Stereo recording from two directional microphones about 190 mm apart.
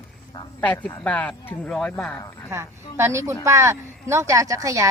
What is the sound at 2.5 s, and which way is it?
Speech, 15° right (ahead or behind).